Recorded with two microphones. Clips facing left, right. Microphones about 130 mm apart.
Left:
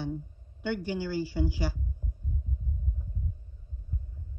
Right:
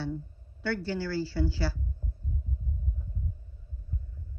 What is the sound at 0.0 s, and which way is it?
A woman's voice, 15° left (ahead or behind).